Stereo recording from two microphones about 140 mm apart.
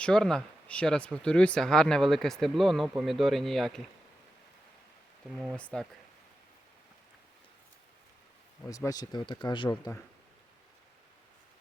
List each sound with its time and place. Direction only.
0.0 s speech: 5° left (ahead or behind)
5.5 s speech: 10° left (ahead or behind)
8.7 s speech: 25° left (ahead or behind)